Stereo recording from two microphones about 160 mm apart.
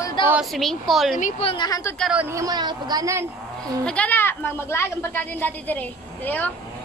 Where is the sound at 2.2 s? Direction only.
20° right (ahead or behind).